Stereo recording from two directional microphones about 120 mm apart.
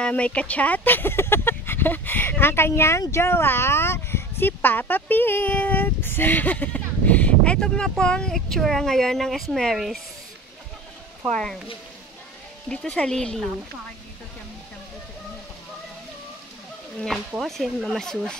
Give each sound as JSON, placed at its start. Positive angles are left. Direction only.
{"t": 0.0, "sound": "a woman's voice", "side_deg": 10}
{"t": 12.6, "sound": "speech", "side_deg": 10}
{"t": 17.4, "sound": "a woman's voice", "side_deg": 0}